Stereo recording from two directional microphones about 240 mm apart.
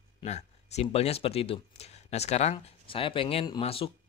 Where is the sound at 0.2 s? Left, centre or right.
Left.